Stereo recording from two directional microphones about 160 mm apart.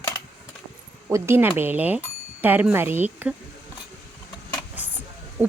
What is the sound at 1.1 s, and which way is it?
Speech, 15° right (ahead or behind).